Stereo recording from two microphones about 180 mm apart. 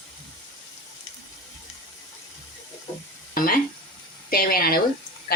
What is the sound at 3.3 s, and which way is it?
Frying, 50° left (ahead or behind).